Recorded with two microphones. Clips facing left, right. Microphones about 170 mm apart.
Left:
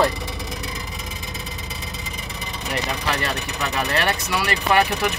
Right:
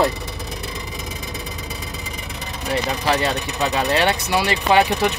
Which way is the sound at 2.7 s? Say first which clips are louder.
Right 5 dB; 25° right (ahead or behind).